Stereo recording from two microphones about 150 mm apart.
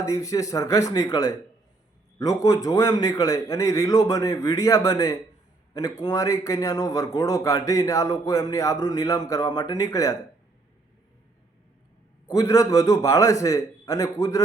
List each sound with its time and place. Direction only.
0.0 s a man's voice: 20° left (ahead or behind)
12.3 s a man's voice: 25° left (ahead or behind)